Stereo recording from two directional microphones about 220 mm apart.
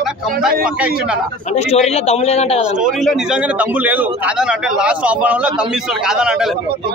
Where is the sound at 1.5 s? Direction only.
30° left (ahead or behind).